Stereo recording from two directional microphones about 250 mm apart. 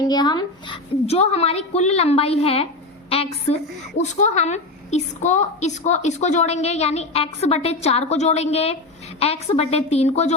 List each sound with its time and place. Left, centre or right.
0.1 s a woman's voice: centre